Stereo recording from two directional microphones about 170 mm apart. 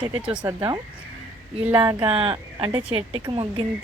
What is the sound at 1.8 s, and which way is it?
Speech, 25° right (ahead or behind).